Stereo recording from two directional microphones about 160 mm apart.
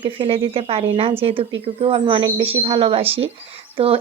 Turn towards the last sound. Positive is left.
turn(degrees=-35)  # may be behind; listen again after turning